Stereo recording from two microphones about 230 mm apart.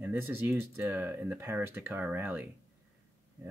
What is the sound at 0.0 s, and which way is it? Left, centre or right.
Speech, centre.